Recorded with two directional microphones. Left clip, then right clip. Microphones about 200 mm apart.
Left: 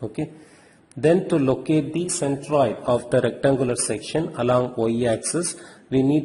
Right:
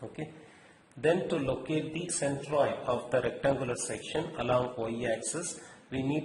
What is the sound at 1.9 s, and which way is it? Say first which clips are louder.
Speech: left 8 dB; 40° left (ahead or behind).